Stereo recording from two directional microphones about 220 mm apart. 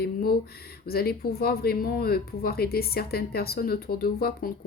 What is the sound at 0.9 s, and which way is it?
Speech, 45° left (ahead or behind).